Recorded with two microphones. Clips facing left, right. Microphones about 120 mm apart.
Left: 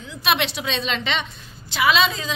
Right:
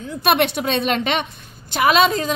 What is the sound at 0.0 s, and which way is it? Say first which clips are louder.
A woman's voice: right 5 dB; 50° right (ahead or behind).